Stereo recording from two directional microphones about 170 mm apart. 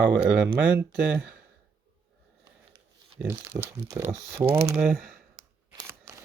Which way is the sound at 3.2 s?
5° right (ahead or behind).